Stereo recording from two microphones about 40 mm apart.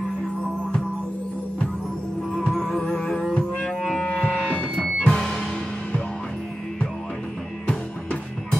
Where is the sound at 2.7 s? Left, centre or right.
Centre.